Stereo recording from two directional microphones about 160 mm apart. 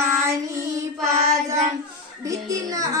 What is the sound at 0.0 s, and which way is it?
Child singing, 15° right (ahead or behind).